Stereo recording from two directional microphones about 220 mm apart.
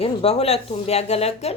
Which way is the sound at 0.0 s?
25° left (ahead or behind).